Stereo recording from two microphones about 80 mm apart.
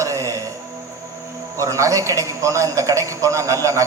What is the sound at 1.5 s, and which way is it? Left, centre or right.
A man's voice, right.